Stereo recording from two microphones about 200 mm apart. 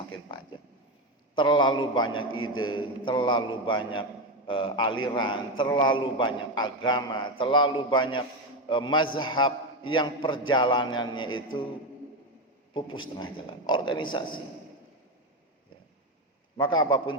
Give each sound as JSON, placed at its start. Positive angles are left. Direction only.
{"t": 1.4, "sound": "a man's voice", "side_deg": 25}
{"t": 2.3, "sound": "a man's voice", "side_deg": 90}
{"t": 2.7, "sound": "a man's voice", "side_deg": 25}
{"t": 13.3, "sound": "a man's voice", "side_deg": 25}
{"t": 16.6, "sound": "a man's voice", "side_deg": 25}